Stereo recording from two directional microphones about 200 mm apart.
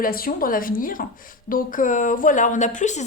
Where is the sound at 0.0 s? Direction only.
45° left (ahead or behind).